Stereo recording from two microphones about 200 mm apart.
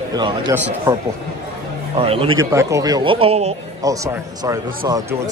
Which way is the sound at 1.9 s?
30° right (ahead or behind).